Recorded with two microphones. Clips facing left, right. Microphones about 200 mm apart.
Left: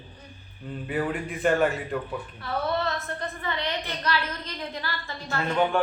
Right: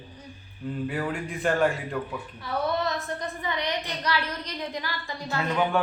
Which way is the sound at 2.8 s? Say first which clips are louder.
Right 1 dB; 15° right (ahead or behind).